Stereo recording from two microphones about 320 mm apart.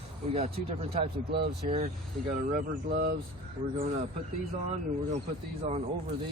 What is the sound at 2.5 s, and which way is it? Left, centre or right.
Speech, right.